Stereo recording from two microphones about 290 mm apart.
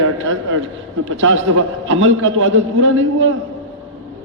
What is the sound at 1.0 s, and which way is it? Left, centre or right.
A man's voice, right.